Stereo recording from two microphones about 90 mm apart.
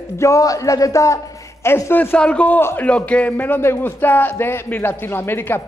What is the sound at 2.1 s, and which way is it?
A man's voice, 15° left (ahead or behind).